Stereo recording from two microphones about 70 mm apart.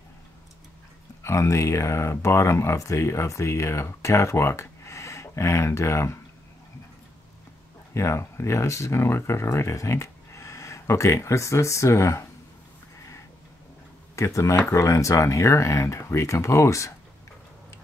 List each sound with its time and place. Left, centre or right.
1.2 s speech: left
7.9 s speech: left
14.1 s speech: left